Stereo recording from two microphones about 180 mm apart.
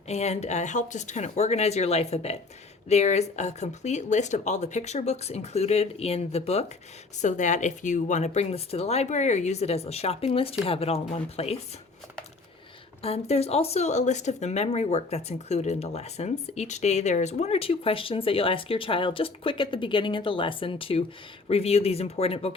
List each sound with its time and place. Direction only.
0.1 s speech: 35° left (ahead or behind)
13.0 s speech: 35° left (ahead or behind)